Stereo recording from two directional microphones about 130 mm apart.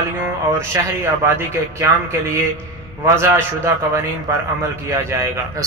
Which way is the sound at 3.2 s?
20° right (ahead or behind).